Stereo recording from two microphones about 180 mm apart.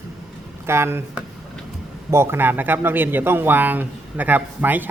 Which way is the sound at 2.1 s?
15° right (ahead or behind).